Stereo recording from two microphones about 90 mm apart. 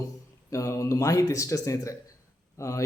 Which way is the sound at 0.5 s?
35° left (ahead or behind).